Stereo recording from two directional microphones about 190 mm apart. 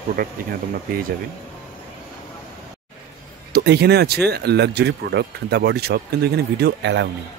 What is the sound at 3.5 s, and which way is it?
Speech, 60° right (ahead or behind).